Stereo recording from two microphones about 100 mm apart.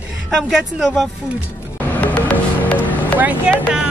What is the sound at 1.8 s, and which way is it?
Music, 15° left (ahead or behind).